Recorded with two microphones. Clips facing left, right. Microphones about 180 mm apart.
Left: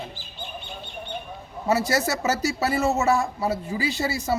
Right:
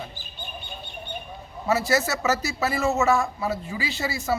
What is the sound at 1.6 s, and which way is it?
A man's voice, 35° left (ahead or behind).